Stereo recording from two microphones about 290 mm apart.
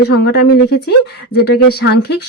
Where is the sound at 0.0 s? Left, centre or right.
Left.